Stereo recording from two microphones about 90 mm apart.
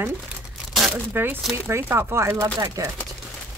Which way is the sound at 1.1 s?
25° right (ahead or behind).